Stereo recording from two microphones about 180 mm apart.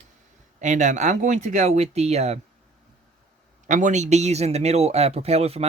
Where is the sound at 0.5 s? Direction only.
40° right (ahead or behind).